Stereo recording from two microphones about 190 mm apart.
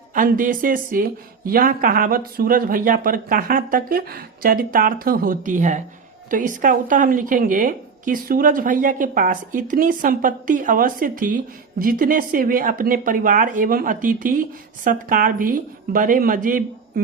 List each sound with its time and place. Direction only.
0.1 s speech: 45° right (ahead or behind)